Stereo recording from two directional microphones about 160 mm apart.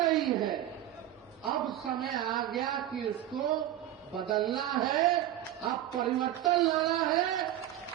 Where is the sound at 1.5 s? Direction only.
Centre (ahead or behind).